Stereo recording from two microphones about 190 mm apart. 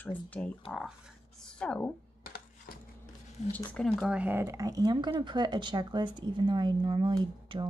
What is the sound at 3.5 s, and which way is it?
Speech, 10° left (ahead or behind).